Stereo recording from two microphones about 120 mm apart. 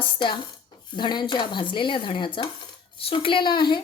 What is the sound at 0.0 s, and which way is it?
Speech, 40° left (ahead or behind).